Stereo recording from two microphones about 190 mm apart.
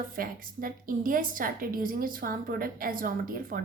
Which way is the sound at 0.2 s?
45° right (ahead or behind).